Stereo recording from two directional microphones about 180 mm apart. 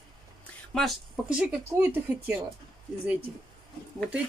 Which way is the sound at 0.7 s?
Centre (ahead or behind).